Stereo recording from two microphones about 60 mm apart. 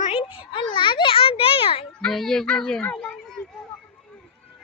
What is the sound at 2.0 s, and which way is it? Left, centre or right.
Child singing, centre.